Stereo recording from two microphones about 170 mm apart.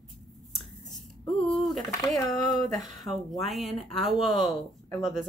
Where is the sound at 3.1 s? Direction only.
Centre (ahead or behind).